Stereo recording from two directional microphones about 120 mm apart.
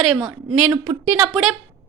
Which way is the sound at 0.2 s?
20° right (ahead or behind).